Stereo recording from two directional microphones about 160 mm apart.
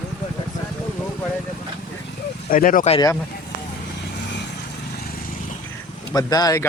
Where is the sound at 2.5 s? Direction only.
60° left (ahead or behind).